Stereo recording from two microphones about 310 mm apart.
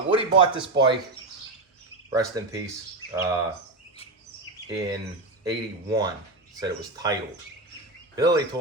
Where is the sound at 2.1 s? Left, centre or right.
Centre.